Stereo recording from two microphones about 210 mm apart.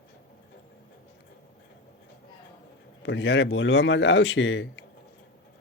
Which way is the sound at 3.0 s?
60° left (ahead or behind).